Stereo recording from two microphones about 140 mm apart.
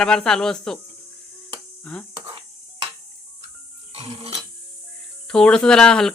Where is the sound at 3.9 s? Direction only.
40° right (ahead or behind).